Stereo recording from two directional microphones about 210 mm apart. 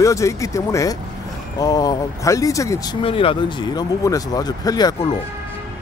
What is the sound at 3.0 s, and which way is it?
Speech, 25° left (ahead or behind).